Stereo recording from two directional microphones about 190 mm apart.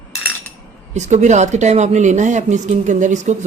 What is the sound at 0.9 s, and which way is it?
Speech, 40° right (ahead or behind).